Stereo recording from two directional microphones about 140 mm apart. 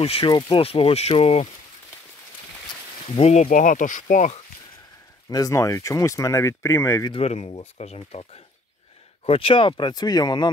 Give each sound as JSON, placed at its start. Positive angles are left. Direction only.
{"t": 0.0, "sound": "speech", "side_deg": 45}
{"t": 0.3, "sound": "speech", "side_deg": 30}
{"t": 0.6, "sound": "speech", "side_deg": 40}
{"t": 3.2, "sound": "speech", "side_deg": 50}
{"t": 3.4, "sound": "speech", "side_deg": 65}
{"t": 5.3, "sound": "speech", "side_deg": 25}
{"t": 7.1, "sound": "speech", "side_deg": 45}